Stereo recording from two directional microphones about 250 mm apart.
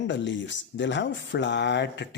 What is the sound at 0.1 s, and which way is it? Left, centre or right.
Speech, left.